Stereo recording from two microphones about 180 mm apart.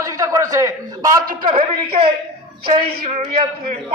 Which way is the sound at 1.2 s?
50° right (ahead or behind).